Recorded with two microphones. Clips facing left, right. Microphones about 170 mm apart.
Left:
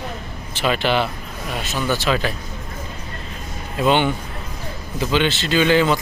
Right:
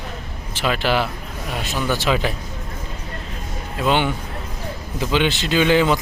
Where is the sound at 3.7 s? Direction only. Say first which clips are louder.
Left 2 dB; centre (ahead or behind).